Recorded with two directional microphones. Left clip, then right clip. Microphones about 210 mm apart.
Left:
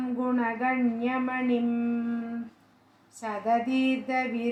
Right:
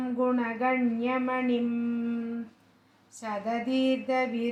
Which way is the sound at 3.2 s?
25° right (ahead or behind).